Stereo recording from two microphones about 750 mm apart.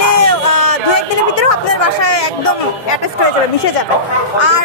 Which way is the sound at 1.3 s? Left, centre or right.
Left.